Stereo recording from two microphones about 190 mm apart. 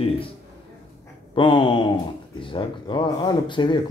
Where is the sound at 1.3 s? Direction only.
25° left (ahead or behind).